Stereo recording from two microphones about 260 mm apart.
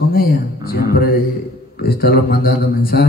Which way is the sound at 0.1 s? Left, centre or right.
Left.